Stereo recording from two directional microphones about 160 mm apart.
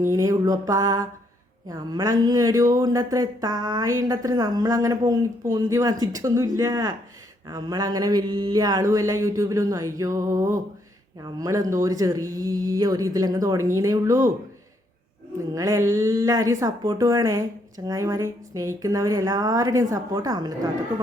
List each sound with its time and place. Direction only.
0.0 s speech: 20° right (ahead or behind)
15.5 s speech: 20° right (ahead or behind)